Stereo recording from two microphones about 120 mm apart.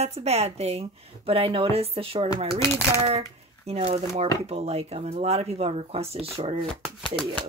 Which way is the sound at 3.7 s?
60° right (ahead or behind).